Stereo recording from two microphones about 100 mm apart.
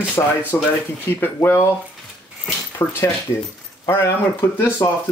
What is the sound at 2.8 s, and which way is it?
Speech, 25° left (ahead or behind).